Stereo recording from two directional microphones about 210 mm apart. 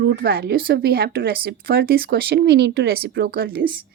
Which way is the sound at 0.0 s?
50° right (ahead or behind).